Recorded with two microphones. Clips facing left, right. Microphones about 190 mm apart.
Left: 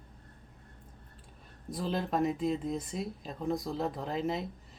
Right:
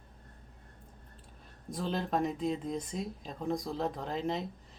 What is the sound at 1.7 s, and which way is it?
Speech, centre (ahead or behind).